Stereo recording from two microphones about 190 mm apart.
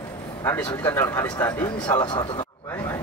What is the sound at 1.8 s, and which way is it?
Speech, 25° left (ahead or behind).